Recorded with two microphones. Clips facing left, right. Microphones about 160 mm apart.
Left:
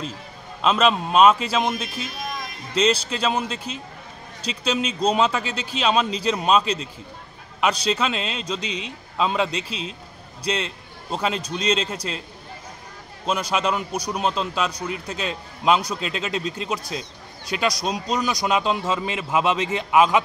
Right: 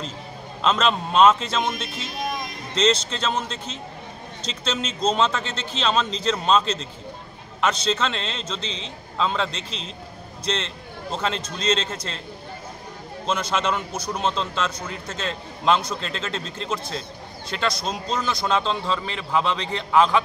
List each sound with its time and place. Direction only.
0.6 s speech: 5° left (ahead or behind)
13.3 s speech: 10° left (ahead or behind)